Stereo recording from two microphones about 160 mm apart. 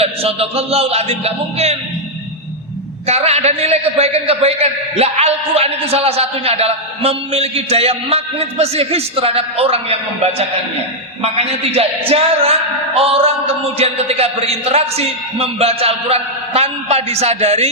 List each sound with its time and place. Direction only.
0.0 s a man's voice: 40° right (ahead or behind)
3.1 s a man's voice: 40° right (ahead or behind)
11.2 s a man's voice: 40° right (ahead or behind)